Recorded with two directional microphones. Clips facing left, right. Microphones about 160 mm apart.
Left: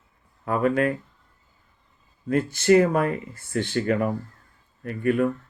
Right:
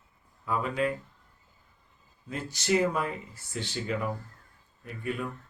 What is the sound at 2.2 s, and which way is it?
Speech, 55° left (ahead or behind).